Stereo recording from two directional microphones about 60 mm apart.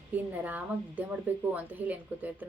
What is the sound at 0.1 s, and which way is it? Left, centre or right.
Speech, right.